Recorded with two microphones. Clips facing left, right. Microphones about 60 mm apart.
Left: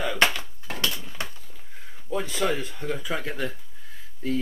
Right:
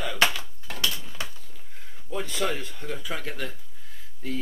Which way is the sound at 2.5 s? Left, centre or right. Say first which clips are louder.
Left 4 dB; left.